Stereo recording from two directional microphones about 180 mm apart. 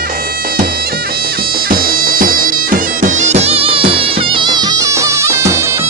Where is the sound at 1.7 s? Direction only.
50° right (ahead or behind).